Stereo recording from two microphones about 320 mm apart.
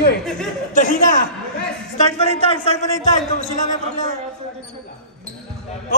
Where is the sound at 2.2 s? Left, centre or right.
Centre.